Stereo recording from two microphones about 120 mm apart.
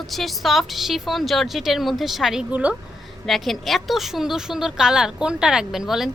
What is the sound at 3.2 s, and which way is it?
Speech, centre (ahead or behind).